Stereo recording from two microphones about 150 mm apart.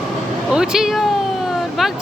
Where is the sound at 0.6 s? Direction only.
5° right (ahead or behind).